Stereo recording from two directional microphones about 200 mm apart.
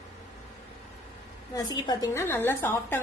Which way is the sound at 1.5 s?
20° left (ahead or behind).